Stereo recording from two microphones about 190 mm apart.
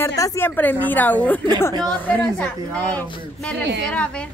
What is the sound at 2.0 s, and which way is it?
Speech, 5° left (ahead or behind).